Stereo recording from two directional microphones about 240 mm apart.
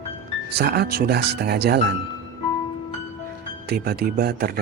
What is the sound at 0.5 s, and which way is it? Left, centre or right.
Speech, right.